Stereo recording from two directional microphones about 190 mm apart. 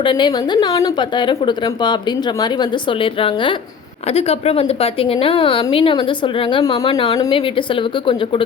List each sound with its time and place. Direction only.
0.0 s a woman's voice: 25° left (ahead or behind)